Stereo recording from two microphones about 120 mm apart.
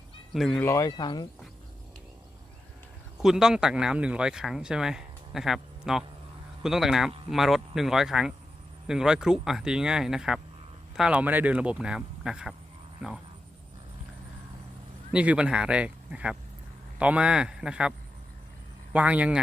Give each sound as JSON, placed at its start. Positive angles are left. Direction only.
{"t": 0.3, "sound": "speech", "side_deg": 5}
{"t": 0.6, "sound": "speech", "side_deg": 25}
{"t": 3.2, "sound": "speech", "side_deg": -5}
{"t": 15.1, "sound": "speech", "side_deg": -10}
{"t": 18.9, "sound": "speech", "side_deg": -10}